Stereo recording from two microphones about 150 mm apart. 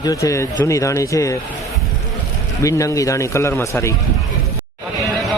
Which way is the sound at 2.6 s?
20° left (ahead or behind).